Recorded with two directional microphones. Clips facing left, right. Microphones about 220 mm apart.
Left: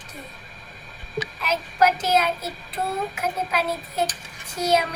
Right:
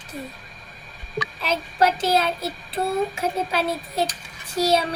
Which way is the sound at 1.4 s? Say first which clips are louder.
Even; 30° right (ahead or behind).